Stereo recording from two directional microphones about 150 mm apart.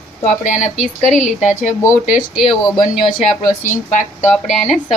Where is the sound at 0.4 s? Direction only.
60° left (ahead or behind).